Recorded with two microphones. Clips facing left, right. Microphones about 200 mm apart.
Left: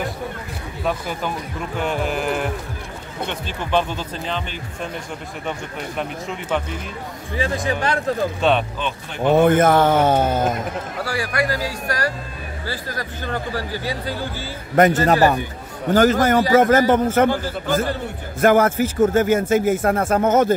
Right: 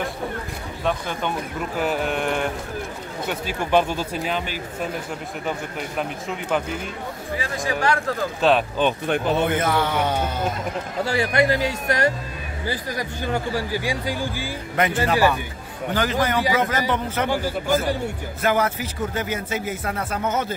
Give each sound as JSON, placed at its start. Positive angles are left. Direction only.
{"t": 0.8, "sound": "a sound", "side_deg": 5}
{"t": 3.3, "sound": "speech", "side_deg": -10}
{"t": 5.9, "sound": "a sound", "side_deg": 0}
{"t": 7.3, "sound": "speech", "side_deg": 25}
{"t": 8.4, "sound": "a sound", "side_deg": 0}
{"t": 8.7, "sound": "speech", "side_deg": -50}
{"t": 9.4, "sound": "speech", "side_deg": 50}
{"t": 11.1, "sound": "speech", "side_deg": -25}
{"t": 14.8, "sound": "speech", "side_deg": 40}
{"t": 17.3, "sound": "speech", "side_deg": -10}
{"t": 18.4, "sound": "speech", "side_deg": 50}